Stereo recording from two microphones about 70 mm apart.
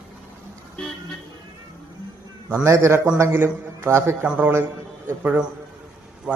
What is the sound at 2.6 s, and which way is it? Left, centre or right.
A man's voice, right.